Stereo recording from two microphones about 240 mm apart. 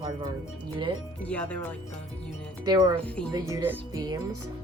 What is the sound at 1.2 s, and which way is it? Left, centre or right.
Speech, centre.